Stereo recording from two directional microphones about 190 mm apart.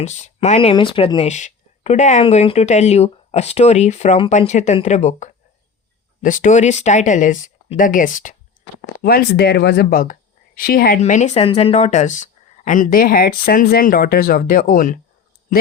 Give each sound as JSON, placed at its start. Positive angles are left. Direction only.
{"t": 0.0, "sound": "speech", "side_deg": 35}
{"t": 9.0, "sound": "speech", "side_deg": 55}
{"t": 11.0, "sound": "speech", "side_deg": 35}